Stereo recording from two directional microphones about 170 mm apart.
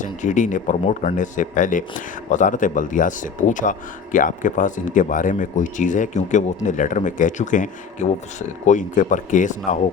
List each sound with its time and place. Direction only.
0.0 s speech: 45° left (ahead or behind)